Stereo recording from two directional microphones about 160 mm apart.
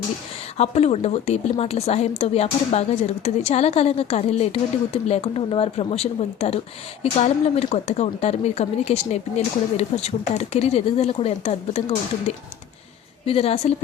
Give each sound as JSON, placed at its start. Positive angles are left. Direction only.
{"t": 0.5, "sound": "a woman's voice", "side_deg": 40}